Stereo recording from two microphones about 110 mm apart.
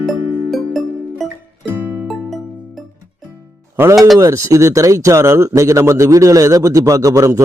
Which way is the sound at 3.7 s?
20° right (ahead or behind).